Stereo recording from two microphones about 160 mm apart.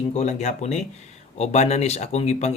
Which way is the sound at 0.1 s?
45° left (ahead or behind).